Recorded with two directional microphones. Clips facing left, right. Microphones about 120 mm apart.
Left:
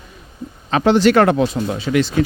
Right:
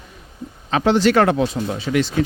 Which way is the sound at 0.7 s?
60° left (ahead or behind).